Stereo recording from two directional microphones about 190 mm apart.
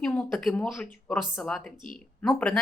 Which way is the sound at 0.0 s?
5° left (ahead or behind).